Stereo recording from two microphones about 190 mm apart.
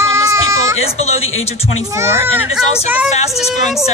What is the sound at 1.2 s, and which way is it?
Speech, 90° left.